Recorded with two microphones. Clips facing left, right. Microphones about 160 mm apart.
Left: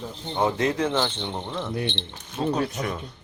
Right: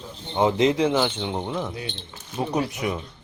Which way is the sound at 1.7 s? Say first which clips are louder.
Left 6 dB; 75° left (ahead or behind).